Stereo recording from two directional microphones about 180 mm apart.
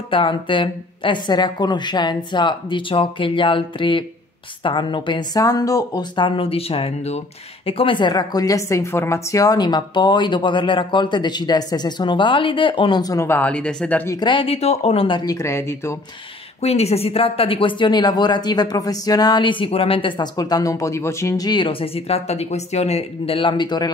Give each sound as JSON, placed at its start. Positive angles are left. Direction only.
{"t": 0.1, "sound": "a woman's voice", "side_deg": 30}
{"t": 16.6, "sound": "a woman's voice", "side_deg": 35}